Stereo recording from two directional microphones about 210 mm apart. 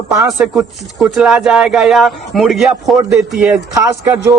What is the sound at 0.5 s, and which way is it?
Speech, centre (ahead or behind).